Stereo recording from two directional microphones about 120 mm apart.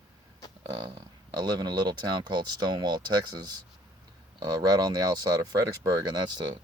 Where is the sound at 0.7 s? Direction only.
40° right (ahead or behind).